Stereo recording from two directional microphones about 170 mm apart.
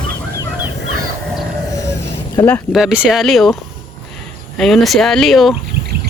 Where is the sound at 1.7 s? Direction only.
20° left (ahead or behind).